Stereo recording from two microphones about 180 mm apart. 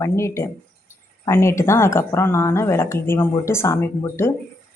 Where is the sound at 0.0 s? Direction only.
15° left (ahead or behind).